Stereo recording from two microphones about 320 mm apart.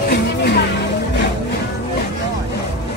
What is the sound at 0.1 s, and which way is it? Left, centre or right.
Music, left.